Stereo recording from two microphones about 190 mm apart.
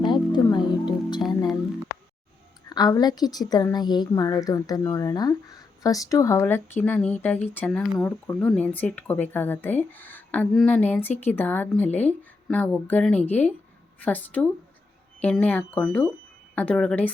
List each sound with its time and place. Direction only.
0.1 s music: 25° left (ahead or behind)
2.6 s a woman's voice: 20° left (ahead or behind)